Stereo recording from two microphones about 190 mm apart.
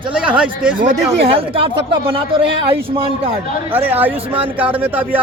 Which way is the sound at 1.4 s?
30° right (ahead or behind).